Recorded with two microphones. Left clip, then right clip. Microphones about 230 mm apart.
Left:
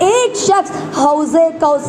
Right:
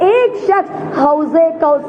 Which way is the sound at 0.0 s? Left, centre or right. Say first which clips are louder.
Right 1 dB; left.